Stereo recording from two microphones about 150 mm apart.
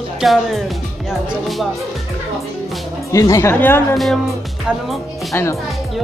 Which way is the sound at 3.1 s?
20° left (ahead or behind).